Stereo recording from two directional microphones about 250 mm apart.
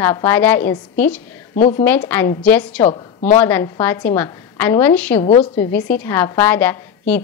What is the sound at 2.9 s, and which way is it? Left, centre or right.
Speech, left.